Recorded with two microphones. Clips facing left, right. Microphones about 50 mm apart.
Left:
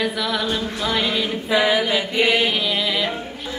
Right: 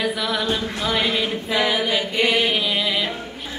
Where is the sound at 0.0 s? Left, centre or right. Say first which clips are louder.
Even; centre.